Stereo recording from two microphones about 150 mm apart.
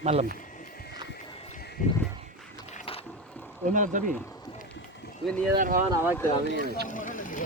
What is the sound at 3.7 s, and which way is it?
Speech, 60° right (ahead or behind).